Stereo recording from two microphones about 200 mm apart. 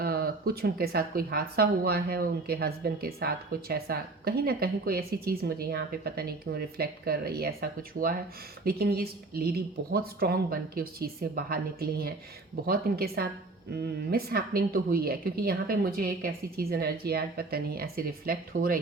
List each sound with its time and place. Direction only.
0.0 s speech: 50° right (ahead or behind)